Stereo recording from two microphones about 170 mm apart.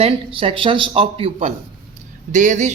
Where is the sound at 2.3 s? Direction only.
45° right (ahead or behind).